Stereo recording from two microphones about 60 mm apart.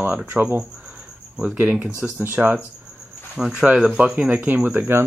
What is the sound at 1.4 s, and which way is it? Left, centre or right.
Speech, centre.